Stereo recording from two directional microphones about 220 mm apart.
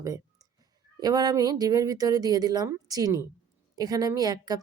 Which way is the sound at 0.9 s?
20° right (ahead or behind).